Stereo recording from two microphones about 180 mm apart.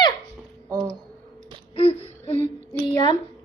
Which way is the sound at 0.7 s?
15° right (ahead or behind).